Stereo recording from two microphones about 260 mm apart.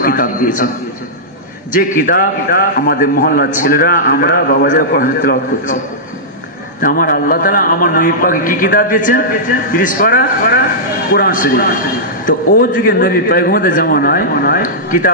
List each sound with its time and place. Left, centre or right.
0.0 s a man's voice: left
1.8 s a man's voice: left
6.8 s a man's voice: left